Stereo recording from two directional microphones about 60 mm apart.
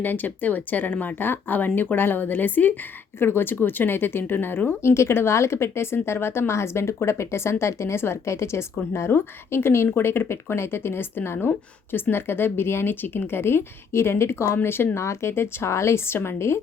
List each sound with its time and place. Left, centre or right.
0.0 s speech: left
4.8 s a woman's voice: left
15.0 s a woman's voice: left